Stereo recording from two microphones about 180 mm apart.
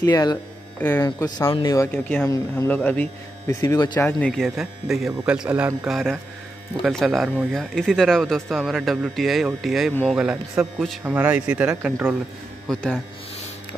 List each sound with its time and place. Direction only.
0.0 s speech: 20° left (ahead or behind)
0.7 s speech: 10° left (ahead or behind)
1.0 s speech: 20° left (ahead or behind)
1.9 s speech: 10° left (ahead or behind)
4.0 s speech: 5° left (ahead or behind)